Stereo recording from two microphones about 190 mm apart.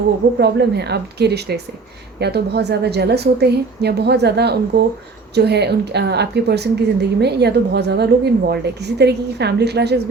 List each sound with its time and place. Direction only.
0.3 s a woman's voice: 60° right (ahead or behind)